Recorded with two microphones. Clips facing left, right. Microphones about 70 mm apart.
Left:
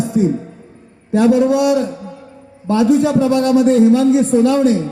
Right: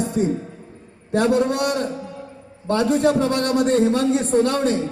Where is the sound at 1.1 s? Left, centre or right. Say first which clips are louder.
Left 6 dB; right.